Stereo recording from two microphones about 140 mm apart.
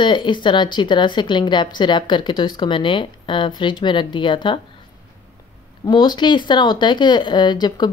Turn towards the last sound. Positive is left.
turn(degrees=30)  # may be behind; listen again after turning